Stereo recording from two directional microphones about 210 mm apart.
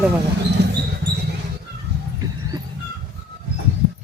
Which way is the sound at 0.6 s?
55° right (ahead or behind).